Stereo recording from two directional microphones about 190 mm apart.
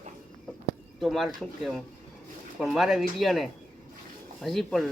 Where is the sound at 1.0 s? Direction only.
Centre (ahead or behind).